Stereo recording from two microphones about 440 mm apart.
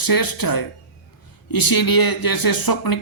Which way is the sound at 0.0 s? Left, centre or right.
Left.